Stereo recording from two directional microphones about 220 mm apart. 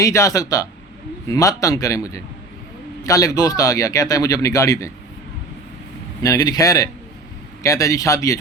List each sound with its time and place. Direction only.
0.0 s speech: 15° left (ahead or behind)
6.2 s speech: 15° left (ahead or behind)